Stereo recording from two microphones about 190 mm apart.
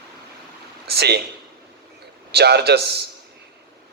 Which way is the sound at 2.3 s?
60° right (ahead or behind).